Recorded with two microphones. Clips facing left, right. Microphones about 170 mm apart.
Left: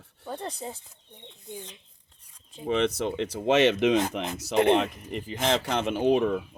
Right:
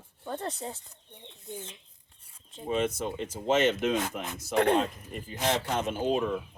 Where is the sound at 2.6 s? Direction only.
75° left (ahead or behind).